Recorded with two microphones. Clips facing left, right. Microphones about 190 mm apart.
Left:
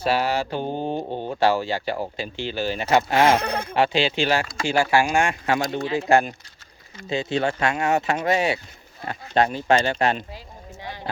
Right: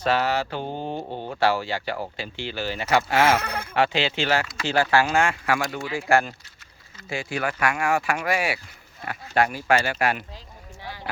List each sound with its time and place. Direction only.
0.0 s speech: 15° left (ahead or behind)